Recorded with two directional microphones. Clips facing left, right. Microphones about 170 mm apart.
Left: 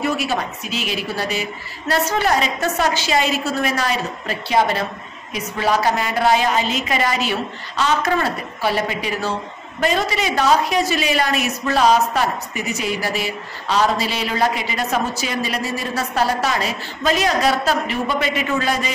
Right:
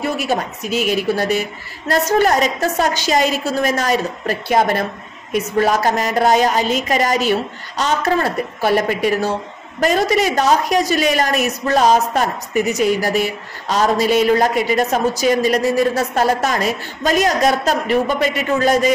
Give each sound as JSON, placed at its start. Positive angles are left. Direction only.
{"t": 0.0, "sound": "a woman's voice", "side_deg": -45}